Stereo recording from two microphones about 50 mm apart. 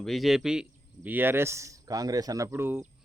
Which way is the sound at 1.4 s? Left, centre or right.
Right.